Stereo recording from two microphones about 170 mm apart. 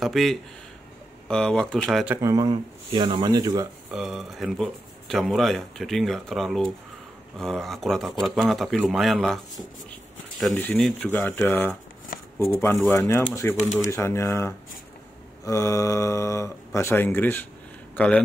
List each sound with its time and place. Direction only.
0.0 s speech: centre (ahead or behind)
2.2 s speech: 25° right (ahead or behind)
3.9 s speech: 5° right (ahead or behind)